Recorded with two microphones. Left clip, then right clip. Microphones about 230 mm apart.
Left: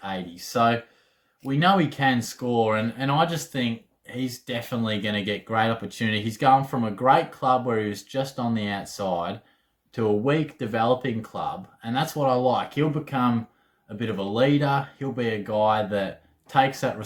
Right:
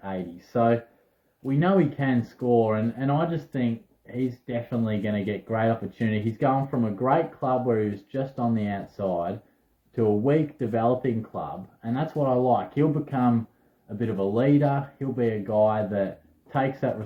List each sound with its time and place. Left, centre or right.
0.0 s speech: centre
9.9 s speech: centre